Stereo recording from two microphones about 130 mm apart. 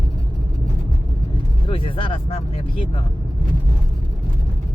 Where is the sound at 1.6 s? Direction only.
45° left (ahead or behind).